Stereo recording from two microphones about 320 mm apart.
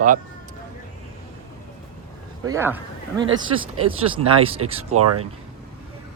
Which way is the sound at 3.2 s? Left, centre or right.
Right.